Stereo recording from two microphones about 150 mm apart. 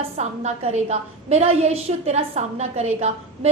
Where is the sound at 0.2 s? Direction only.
50° right (ahead or behind).